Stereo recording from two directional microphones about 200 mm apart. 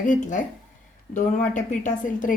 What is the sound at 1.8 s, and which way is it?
Speech, 40° left (ahead or behind).